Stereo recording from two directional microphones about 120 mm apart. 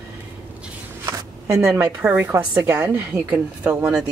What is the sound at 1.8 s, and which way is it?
A woman's voice, 15° right (ahead or behind).